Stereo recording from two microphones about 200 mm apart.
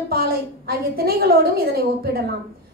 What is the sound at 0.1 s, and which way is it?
A woman's voice, 50° right (ahead or behind).